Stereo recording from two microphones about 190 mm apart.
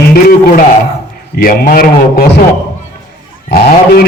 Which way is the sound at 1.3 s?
55° left (ahead or behind).